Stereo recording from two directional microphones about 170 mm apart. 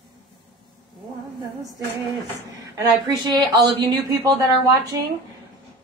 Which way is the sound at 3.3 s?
25° right (ahead or behind).